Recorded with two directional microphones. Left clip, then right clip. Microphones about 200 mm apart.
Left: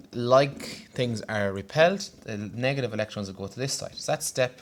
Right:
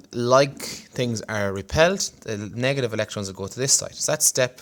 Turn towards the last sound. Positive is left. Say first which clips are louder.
# right 5 dB
turn(degrees=-45)  # may be behind; listen again after turning